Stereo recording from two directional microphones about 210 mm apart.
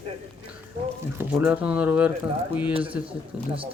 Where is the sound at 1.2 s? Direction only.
10° right (ahead or behind).